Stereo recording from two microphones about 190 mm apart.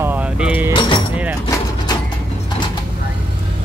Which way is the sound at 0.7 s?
25° left (ahead or behind).